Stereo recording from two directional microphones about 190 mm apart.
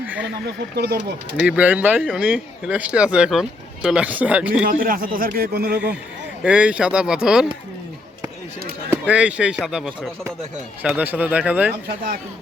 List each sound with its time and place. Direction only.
0.8 s speech: 65° right (ahead or behind)
1.5 s speech: 5° right (ahead or behind)
4.7 s speech: 50° right (ahead or behind)
6.4 s speech: 5° right (ahead or behind)
8.9 s speech: 5° right (ahead or behind)